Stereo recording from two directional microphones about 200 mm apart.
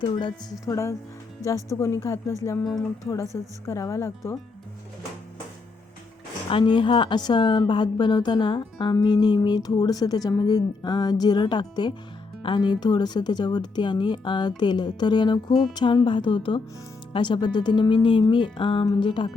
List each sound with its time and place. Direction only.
0.0 s a woman's voice: 25° left (ahead or behind)
6.5 s a woman's voice: 25° left (ahead or behind)